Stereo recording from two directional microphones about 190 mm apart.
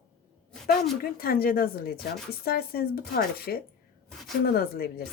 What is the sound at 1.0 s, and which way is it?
A woman's voice, 50° left (ahead or behind).